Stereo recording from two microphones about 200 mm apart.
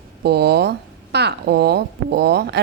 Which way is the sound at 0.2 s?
55° right (ahead or behind).